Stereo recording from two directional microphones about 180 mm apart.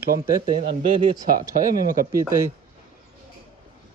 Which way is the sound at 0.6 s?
30° right (ahead or behind).